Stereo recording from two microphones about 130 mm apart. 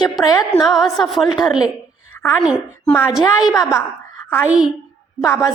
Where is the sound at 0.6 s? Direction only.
Centre (ahead or behind).